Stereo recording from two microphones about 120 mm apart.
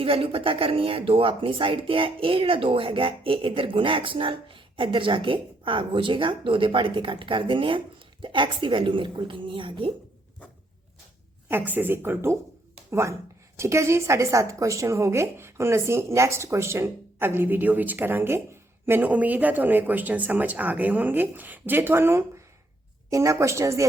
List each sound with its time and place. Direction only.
0.0 s speech: 50° right (ahead or behind)
11.4 s a woman's voice: 15° right (ahead or behind)